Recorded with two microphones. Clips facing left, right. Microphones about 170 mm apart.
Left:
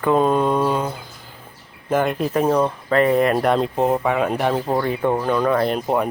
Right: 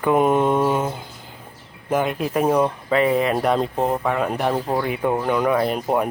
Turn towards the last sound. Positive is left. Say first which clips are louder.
# left 1 dB
turn(degrees=-5)  # may be behind; listen again after turning